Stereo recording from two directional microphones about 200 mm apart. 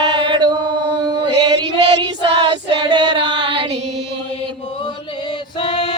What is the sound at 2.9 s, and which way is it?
Music, 20° right (ahead or behind).